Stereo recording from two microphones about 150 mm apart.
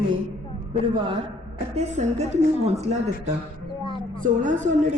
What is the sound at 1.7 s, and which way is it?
Speech, 50° right (ahead or behind).